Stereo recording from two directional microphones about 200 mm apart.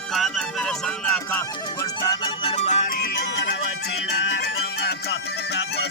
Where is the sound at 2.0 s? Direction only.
25° left (ahead or behind); by 3.3 s 45° left (ahead or behind).